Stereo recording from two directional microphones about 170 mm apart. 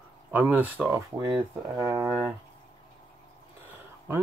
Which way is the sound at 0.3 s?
10° right (ahead or behind).